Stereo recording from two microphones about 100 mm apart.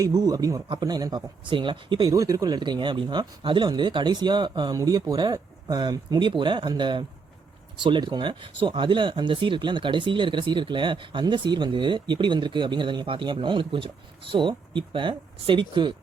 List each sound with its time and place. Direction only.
0.0 s speech: 35° right (ahead or behind); by 2.0 s 60° right (ahead or behind)
2.0 s speech: 35° right (ahead or behind)
4.8 s speech: 40° right (ahead or behind)